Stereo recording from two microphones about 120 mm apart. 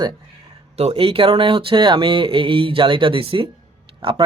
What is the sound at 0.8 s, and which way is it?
Speech, 55° right (ahead or behind).